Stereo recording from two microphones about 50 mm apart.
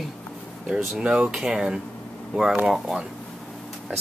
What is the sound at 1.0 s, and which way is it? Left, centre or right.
Speech, centre.